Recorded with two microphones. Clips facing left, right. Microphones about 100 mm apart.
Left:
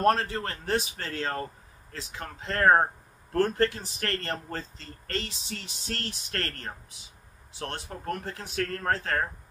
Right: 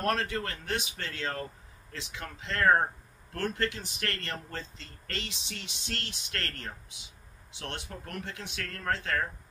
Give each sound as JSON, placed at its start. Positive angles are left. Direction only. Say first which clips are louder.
{"t": 0.0, "sound": "a man's voice", "louder": "left 6 dB", "side_deg": 35}